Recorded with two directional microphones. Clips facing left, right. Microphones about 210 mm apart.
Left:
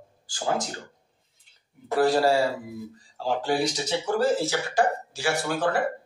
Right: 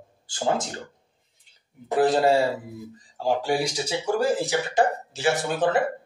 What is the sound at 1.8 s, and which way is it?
A man's voice, 20° right (ahead or behind).